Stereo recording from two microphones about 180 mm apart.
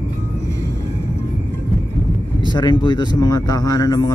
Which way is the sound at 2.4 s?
25° left (ahead or behind).